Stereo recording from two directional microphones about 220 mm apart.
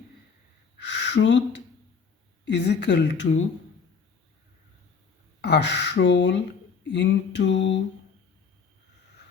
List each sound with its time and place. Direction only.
0.8 s a sound: 55° left (ahead or behind)
2.4 s a woman's voice: 50° left (ahead or behind)
5.4 s a woman's voice: 50° left (ahead or behind)